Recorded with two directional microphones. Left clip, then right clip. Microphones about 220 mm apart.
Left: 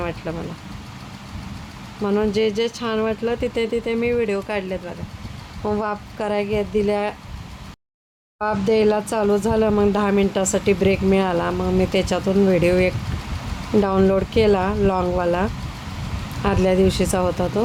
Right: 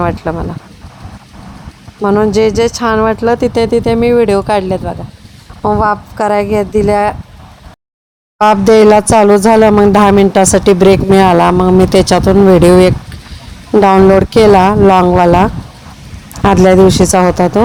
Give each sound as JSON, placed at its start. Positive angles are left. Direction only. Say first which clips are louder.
{"t": 0.0, "sound": "speech", "louder": "right 13 dB", "side_deg": -20}
{"t": 2.0, "sound": "speech", "louder": "right 11 dB", "side_deg": -25}
{"t": 8.4, "sound": "speech", "louder": "right 13 dB", "side_deg": -35}